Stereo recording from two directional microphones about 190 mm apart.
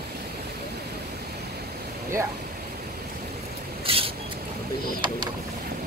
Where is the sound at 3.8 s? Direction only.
30° right (ahead or behind).